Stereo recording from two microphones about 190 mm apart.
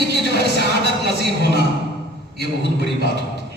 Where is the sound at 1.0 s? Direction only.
60° right (ahead or behind).